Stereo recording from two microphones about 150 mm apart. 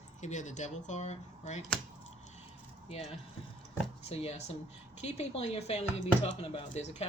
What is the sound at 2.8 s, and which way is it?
Speech, 45° left (ahead or behind).